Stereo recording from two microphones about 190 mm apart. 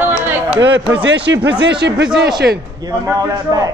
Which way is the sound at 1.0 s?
70° right (ahead or behind).